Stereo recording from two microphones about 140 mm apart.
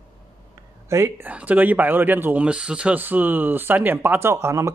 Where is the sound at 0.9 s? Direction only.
15° right (ahead or behind).